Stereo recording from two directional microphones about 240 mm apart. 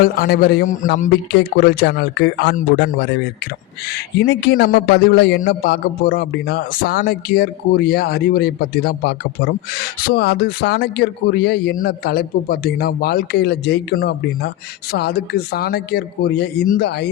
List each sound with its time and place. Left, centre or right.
0.0 s a man's voice: left